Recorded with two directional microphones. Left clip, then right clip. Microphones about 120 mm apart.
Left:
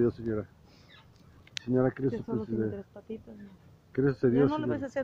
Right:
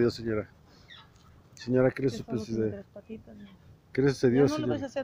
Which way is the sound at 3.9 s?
20° right (ahead or behind).